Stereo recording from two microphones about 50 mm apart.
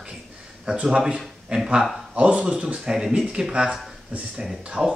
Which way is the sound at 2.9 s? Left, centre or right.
Centre.